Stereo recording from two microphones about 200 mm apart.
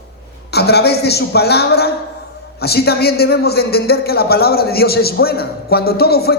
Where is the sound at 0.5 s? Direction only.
55° left (ahead or behind).